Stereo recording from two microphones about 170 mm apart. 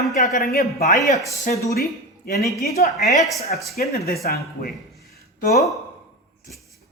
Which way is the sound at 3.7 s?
65° left (ahead or behind).